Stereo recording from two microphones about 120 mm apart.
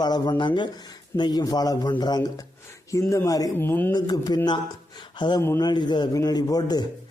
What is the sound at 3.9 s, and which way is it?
Speech, 35° left (ahead or behind).